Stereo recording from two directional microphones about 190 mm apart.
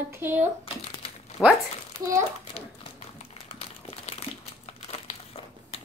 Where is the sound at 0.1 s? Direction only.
10° right (ahead or behind).